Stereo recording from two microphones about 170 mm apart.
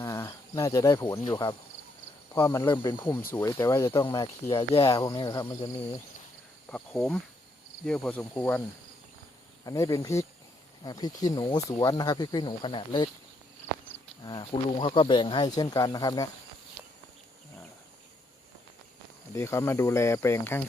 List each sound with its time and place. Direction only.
0.0 s cricket: 20° left (ahead or behind)
1.3 s speech: 25° left (ahead or behind)
6.7 s speech: 10° left (ahead or behind)
9.6 s speech: 20° left (ahead or behind)
14.3 s speech: 30° left (ahead or behind)
19.3 s speech: 15° left (ahead or behind)